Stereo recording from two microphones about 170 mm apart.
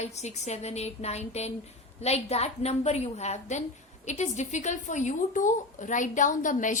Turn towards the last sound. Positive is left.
turn(degrees=50)  # may be behind; listen again after turning